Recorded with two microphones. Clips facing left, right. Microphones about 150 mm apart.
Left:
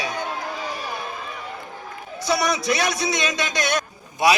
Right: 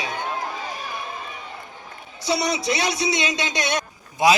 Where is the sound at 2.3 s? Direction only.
25° right (ahead or behind).